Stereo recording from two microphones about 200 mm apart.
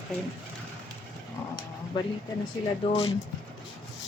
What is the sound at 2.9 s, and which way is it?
Speech, 30° left (ahead or behind).